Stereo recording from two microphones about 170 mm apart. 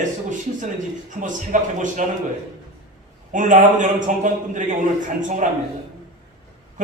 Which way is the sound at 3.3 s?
50° right (ahead or behind).